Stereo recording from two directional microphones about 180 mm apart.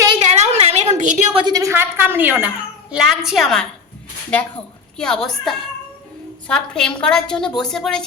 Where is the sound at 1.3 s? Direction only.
25° right (ahead or behind); by 3.7 s centre (ahead or behind).